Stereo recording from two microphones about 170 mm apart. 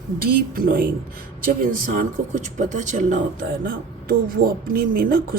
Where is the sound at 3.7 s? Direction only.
60° right (ahead or behind).